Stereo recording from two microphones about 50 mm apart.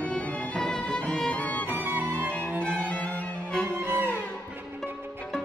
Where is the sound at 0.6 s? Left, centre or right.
Centre.